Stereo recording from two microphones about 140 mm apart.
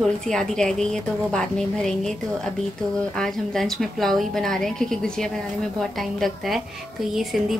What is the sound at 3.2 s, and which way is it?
A woman's voice, 5° left (ahead or behind).